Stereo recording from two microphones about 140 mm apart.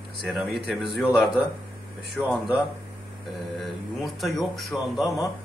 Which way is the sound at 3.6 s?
Centre (ahead or behind).